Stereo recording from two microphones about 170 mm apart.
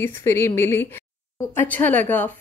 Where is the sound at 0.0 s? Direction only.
15° left (ahead or behind).